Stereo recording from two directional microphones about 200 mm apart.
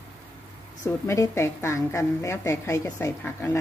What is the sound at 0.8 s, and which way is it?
A woman's voice, 15° left (ahead or behind).